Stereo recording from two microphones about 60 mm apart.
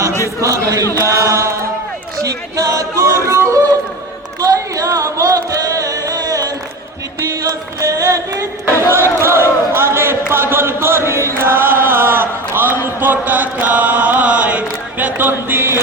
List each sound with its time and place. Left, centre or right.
0.4 s chant: right
2.2 s music: right
3.2 s a sound: right
4.4 s music: right
7.8 s singing: right
8.9 s battle cry: right
9.2 s a sound: right